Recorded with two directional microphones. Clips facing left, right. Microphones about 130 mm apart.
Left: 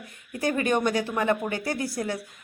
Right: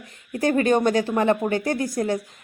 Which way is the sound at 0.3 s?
45° right (ahead or behind).